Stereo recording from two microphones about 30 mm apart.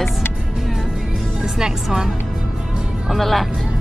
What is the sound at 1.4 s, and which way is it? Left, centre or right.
Speech, centre.